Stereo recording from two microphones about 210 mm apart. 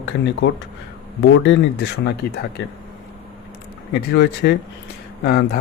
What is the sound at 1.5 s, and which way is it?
Speech, 50° left (ahead or behind).